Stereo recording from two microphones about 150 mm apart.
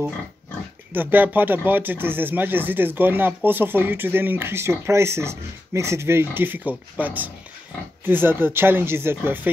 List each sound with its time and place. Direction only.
0.9 s speech: 10° right (ahead or behind)